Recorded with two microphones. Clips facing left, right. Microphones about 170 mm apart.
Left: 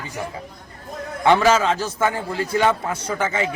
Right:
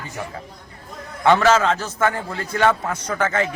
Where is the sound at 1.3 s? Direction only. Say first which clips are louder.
Even; 10° left (ahead or behind).